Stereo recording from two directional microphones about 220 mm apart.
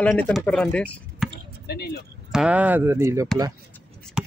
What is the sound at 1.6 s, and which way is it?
Speech, 45° left (ahead or behind).